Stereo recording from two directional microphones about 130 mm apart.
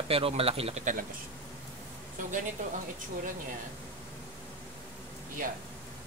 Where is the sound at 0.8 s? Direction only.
75° right (ahead or behind).